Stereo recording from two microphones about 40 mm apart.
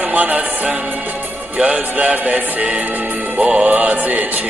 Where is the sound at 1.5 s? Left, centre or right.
Right.